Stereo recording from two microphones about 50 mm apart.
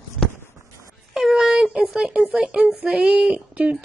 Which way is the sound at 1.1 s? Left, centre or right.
Centre.